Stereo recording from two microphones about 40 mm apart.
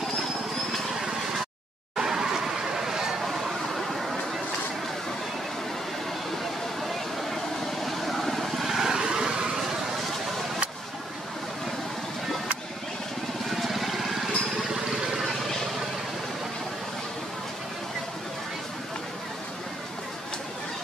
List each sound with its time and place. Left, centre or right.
2.0 s a sound: centre
6.8 s vehicle: centre
8.7 s vehicle: centre
13.5 s vehicle: centre
15.1 s vehicle: centre